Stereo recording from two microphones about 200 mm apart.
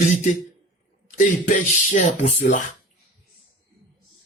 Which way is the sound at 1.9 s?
35° left (ahead or behind).